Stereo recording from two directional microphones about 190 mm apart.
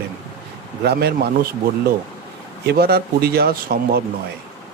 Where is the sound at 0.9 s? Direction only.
55° right (ahead or behind).